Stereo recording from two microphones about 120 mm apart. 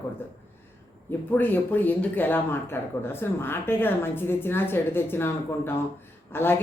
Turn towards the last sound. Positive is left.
turn(degrees=20)  # may be behind; listen again after turning